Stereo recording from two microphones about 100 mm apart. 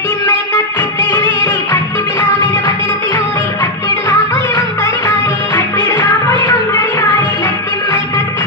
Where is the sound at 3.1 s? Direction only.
20° left (ahead or behind).